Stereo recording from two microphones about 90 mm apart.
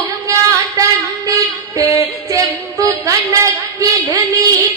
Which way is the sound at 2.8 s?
35° right (ahead or behind).